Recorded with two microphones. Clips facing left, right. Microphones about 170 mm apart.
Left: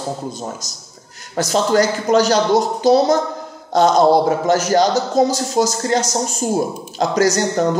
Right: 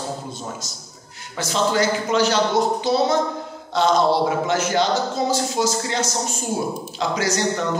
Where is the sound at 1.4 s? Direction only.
40° left (ahead or behind).